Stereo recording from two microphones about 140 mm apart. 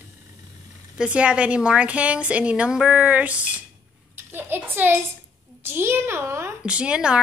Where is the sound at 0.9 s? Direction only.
10° right (ahead or behind).